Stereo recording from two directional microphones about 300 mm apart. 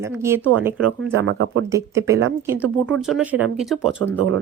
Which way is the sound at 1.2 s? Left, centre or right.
Right.